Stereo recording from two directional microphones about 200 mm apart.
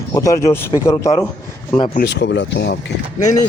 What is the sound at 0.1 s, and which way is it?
Speech, 15° left (ahead or behind).